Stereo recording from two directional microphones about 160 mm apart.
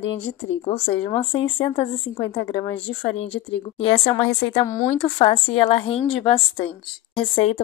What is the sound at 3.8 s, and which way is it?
Speech, 40° left (ahead or behind).